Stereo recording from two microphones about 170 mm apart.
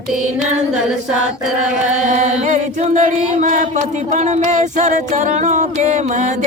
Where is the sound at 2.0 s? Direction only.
45° right (ahead or behind).